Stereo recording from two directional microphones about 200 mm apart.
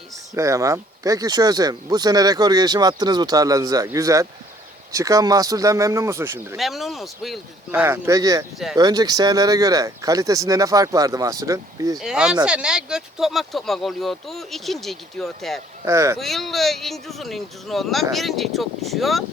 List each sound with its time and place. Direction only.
0.3 s speech: 15° right (ahead or behind)
6.6 s speech: centre (ahead or behind); by 11.9 s 15° right (ahead or behind)
11.9 s speech: 5° right (ahead or behind)
15.8 s speech: 15° right (ahead or behind)
16.1 s speech: centre (ahead or behind)